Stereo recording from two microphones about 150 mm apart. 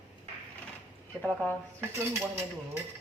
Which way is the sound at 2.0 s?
15° right (ahead or behind).